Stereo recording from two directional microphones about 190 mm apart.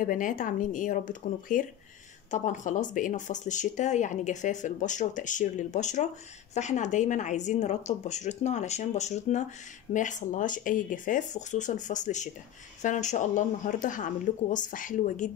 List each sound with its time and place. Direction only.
0.0 s speech: 45° left (ahead or behind)